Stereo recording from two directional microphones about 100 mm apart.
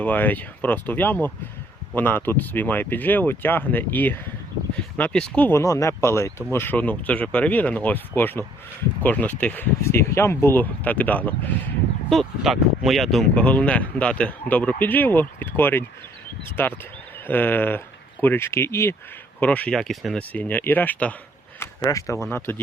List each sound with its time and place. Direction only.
0.0 s speech: 15° left (ahead or behind)
5.5 s speech: 35° left (ahead or behind); by 11.3 s 15° left (ahead or behind)
12.0 s speech: centre (ahead or behind)
13.3 s speech: 15° left (ahead or behind)
19.4 s speech: 15° left (ahead or behind)
19.8 s speech: centre (ahead or behind)
20.1 s speech: 15° left (ahead or behind)
21.6 s speech: 35° left (ahead or behind)
22.3 s speech: 20° left (ahead or behind)